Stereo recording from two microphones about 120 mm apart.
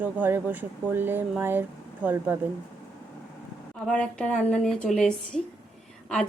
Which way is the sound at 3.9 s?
10° left (ahead or behind).